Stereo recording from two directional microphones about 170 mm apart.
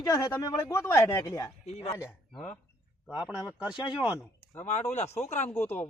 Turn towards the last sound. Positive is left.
turn(degrees=15)  # may be behind; listen again after turning